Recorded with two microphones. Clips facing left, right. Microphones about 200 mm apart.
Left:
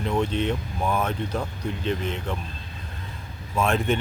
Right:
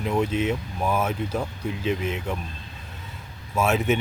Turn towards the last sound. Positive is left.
turn(degrees=-5)  # may be behind; listen again after turning